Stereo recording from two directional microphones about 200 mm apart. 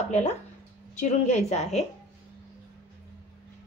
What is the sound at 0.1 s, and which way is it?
A woman's voice, 35° left (ahead or behind).